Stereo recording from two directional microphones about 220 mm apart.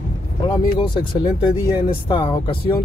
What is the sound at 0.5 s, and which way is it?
Speech, 20° left (ahead or behind).